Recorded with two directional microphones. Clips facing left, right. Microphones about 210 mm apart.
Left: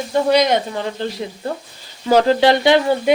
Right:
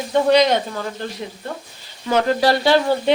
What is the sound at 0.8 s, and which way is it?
A woman's voice, 30° left (ahead or behind).